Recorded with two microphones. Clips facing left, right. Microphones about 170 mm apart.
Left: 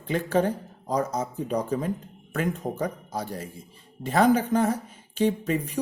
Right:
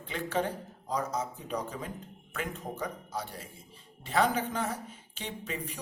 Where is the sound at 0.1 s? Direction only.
45° left (ahead or behind).